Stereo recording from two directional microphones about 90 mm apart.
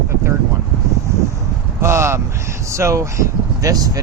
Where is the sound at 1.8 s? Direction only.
30° right (ahead or behind).